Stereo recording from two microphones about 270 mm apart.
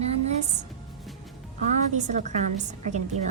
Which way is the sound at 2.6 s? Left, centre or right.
Right.